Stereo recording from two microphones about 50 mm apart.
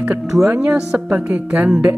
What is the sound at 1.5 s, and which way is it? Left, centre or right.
Speech, centre.